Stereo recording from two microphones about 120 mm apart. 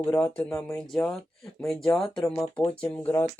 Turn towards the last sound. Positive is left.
turn(degrees=15)  # may be behind; listen again after turning